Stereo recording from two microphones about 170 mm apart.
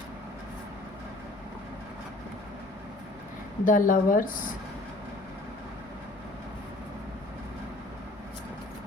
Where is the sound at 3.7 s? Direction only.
55° left (ahead or behind).